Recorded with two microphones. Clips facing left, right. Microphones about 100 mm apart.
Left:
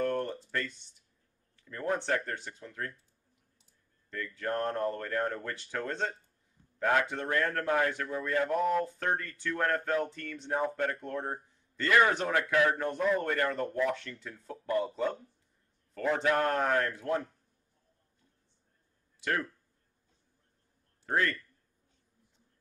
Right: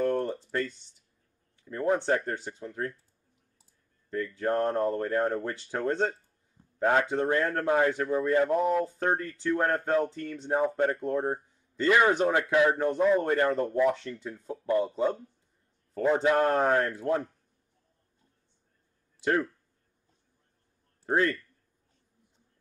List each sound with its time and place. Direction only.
0.0 s a sound: 25° right (ahead or behind)
1.6 s speech: 20° right (ahead or behind)
4.1 s speech: 25° right (ahead or behind)
6.8 s speech: 25° right (ahead or behind)
21.0 s speech: 25° right (ahead or behind)